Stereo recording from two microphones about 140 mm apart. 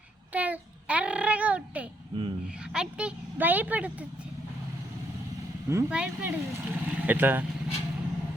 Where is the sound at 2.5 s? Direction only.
5° right (ahead or behind).